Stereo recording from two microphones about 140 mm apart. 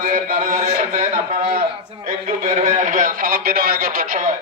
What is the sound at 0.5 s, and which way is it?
Speech, 55° right (ahead or behind).